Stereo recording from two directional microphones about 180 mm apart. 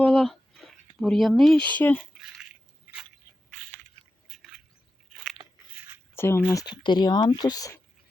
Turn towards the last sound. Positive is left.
turn(degrees=20)  # may be behind; listen again after turning